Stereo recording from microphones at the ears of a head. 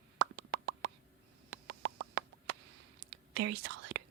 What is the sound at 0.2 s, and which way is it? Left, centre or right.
Plop, right.